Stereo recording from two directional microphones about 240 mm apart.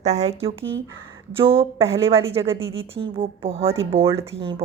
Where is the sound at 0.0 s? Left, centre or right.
Right.